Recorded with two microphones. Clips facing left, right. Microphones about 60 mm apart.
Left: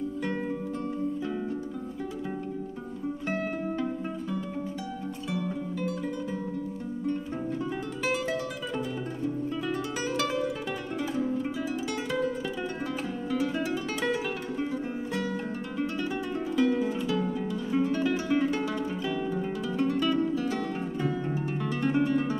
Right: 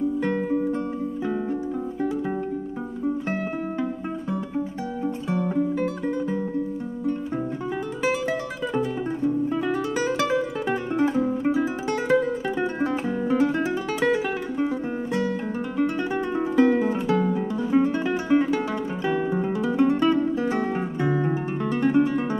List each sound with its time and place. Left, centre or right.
0.2 s music: right
3.3 s music: centre
5.3 s guitar: right
8.0 s music: right
10.0 s music: right
10.7 s music: right
13.3 s guitar: right
13.7 s music: right
16.3 s music: right
17.8 s guitar: right
19.0 s music: right
21.1 s guitar: right